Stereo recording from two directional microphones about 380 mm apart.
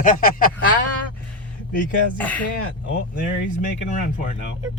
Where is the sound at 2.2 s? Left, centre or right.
Centre.